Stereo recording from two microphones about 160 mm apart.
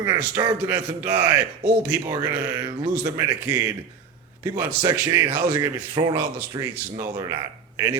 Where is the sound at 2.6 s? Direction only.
25° right (ahead or behind).